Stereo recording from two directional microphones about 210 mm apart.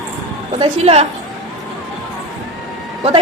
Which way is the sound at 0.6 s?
30° right (ahead or behind).